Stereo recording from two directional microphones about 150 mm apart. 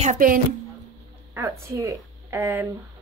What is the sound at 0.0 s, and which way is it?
Speech, 65° right (ahead or behind).